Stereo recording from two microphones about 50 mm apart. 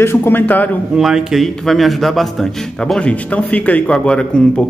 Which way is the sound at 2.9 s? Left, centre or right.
Left.